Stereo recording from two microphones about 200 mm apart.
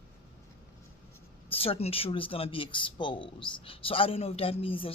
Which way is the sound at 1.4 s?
30° left (ahead or behind).